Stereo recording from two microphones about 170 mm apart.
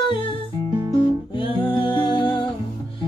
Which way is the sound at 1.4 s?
30° left (ahead or behind).